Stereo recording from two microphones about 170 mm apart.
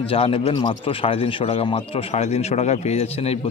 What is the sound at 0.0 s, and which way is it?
A man's voice, 35° left (ahead or behind).